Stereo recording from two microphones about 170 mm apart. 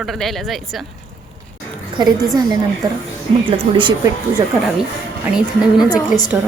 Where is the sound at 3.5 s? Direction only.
30° right (ahead or behind).